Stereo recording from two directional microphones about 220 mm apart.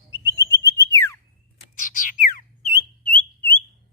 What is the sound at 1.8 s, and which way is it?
Bird, 35° left (ahead or behind).